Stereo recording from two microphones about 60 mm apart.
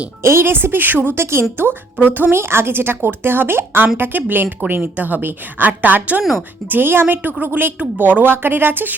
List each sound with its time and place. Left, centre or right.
0.2 s a woman's voice: right